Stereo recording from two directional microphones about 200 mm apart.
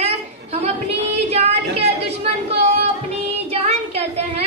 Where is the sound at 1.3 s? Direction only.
30° right (ahead or behind).